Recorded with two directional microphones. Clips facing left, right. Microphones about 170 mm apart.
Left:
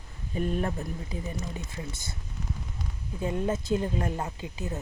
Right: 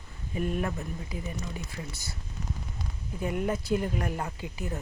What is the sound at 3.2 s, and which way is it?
Speech, 25° left (ahead or behind).